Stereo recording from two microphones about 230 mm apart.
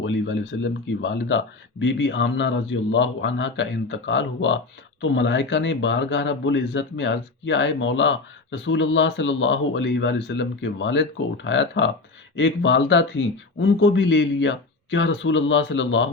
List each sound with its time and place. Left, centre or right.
0.0 s a man's voice: left